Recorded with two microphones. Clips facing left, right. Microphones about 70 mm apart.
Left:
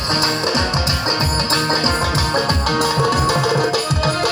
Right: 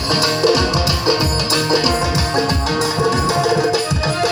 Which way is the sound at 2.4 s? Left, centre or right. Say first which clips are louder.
Right 1 dB; left.